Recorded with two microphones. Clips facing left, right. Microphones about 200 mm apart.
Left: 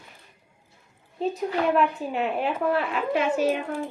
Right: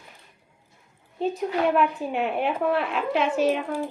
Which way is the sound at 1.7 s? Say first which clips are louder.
Even; centre (ahead or behind).